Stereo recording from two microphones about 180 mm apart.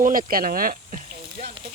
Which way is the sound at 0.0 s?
50° right (ahead or behind).